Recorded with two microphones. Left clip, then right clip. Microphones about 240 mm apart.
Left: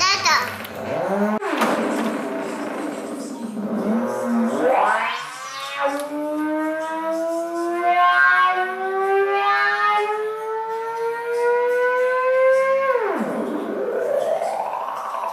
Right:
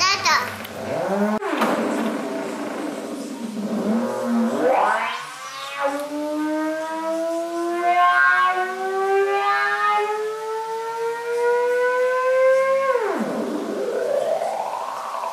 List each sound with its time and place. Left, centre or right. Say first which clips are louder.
0.0 s a sound: left 1 dB; centre
0.9 s wild animals: left 1 dB; centre
3.7 s vehicle: left 1 dB; right
6.5 s civil defense siren: left 1 dB; centre
7.7 s music: left 1 dB; centre
11.4 s music: left 1 dB; centre
13.9 s a sound: left 1 dB; centre